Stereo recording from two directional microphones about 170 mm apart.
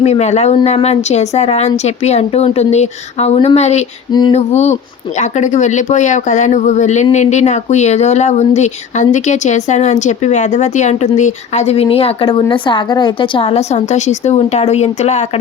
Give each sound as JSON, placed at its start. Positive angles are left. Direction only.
{"t": 0.0, "sound": "speech", "side_deg": 40}
{"t": 4.1, "sound": "female singing", "side_deg": 25}
{"t": 4.4, "sound": "speech", "side_deg": 40}